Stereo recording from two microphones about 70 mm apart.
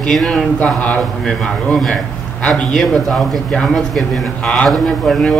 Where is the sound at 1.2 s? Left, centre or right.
Centre.